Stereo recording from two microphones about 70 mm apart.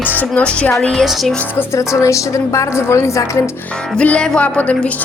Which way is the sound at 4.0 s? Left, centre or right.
Centre.